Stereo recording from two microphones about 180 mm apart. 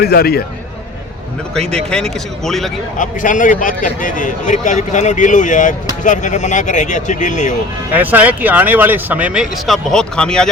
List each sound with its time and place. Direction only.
0.0 s a man's voice: 60° left (ahead or behind)
1.5 s speech: 5° left (ahead or behind)
3.0 s speech: 45° left (ahead or behind)
7.9 s speech: 10° right (ahead or behind)